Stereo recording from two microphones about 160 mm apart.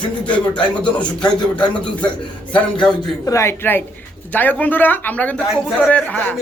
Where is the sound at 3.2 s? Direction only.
20° left (ahead or behind).